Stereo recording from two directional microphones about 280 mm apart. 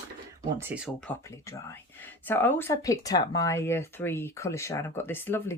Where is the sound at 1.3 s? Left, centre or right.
Centre.